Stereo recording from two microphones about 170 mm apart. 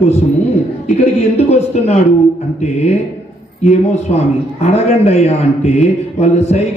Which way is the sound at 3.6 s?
40° left (ahead or behind).